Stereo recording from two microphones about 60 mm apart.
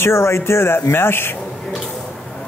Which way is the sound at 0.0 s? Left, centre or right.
Left.